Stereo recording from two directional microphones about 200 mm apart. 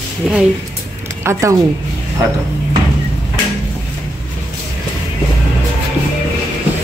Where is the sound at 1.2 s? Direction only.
15° right (ahead or behind).